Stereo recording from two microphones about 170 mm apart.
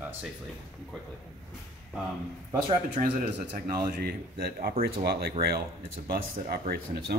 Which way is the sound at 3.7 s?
60° right (ahead or behind).